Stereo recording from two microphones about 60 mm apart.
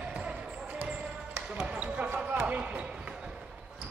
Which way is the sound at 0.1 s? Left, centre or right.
Right.